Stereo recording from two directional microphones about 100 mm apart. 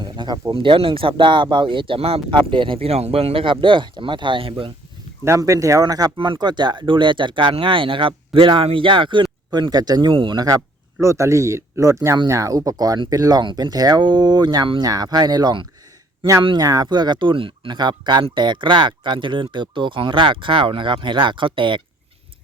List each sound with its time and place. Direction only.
0.0 s a sound: 50° right (ahead or behind)
0.5 s speech: 60° right (ahead or behind); by 2.2 s 80° right
2.3 s speech: 55° right (ahead or behind)
5.2 s speech: 30° right (ahead or behind)
6.1 s speech: 55° right (ahead or behind)
10.1 s speech: 60° right (ahead or behind)
10.3 s speech: 40° right (ahead or behind); by 21.8 s 55° right (ahead or behind)